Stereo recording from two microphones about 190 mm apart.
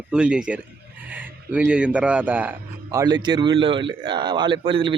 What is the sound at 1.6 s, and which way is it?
Speech, 5° right (ahead or behind).